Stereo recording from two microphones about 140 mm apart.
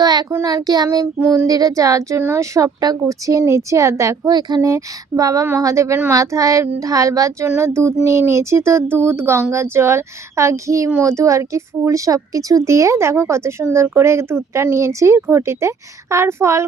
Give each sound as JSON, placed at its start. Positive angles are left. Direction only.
{"t": 0.0, "sound": "child singing", "side_deg": -30}
{"t": 0.3, "sound": "speech", "side_deg": -25}